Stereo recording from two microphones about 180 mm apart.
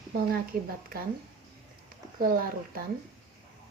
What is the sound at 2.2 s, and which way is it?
Speech, 55° right (ahead or behind).